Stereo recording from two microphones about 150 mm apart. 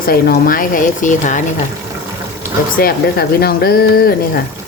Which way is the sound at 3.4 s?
90° left.